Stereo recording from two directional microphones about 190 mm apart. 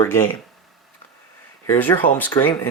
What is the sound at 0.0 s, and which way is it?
Speech, 15° left (ahead or behind).